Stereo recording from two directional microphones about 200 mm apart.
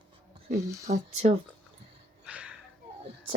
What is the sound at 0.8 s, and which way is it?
Speech, 35° right (ahead or behind).